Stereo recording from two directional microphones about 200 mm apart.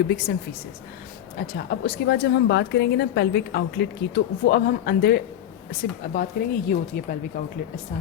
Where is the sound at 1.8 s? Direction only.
55° left (ahead or behind).